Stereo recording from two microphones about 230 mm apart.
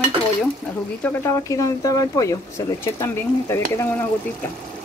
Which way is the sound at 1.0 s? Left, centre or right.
Centre.